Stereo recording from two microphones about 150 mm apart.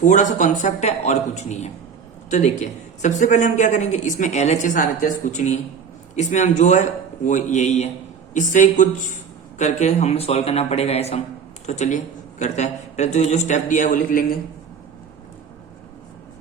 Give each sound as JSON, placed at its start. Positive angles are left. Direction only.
{"t": 0.0, "sound": "speech", "side_deg": 55}